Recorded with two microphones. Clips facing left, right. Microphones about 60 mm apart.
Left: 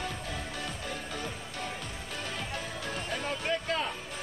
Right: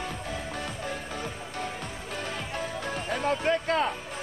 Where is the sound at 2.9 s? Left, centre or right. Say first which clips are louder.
Right 3 dB; centre.